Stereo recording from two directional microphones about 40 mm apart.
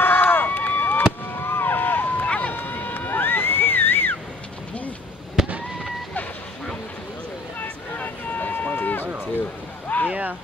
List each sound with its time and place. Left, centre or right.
0.0 s run: left
1.4 s vehicle: left
2.2 s run: left
2.5 s a sound: left
5.4 s fireworks: centre
7.6 s a sound: left
10.0 s vehicle: right